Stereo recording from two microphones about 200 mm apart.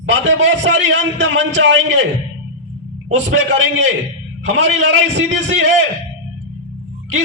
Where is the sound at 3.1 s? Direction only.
65° right (ahead or behind).